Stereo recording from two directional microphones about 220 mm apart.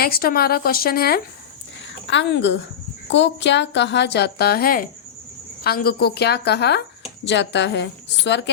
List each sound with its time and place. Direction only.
0.0 s a woman's voice: 45° left (ahead or behind)
1.9 s a woman's voice: 55° left (ahead or behind)